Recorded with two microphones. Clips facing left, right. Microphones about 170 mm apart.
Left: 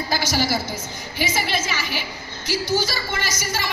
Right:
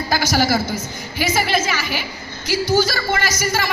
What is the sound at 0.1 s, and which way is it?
Speech, 45° right (ahead or behind).